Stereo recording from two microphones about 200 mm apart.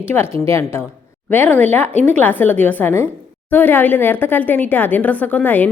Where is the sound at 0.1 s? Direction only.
10° left (ahead or behind).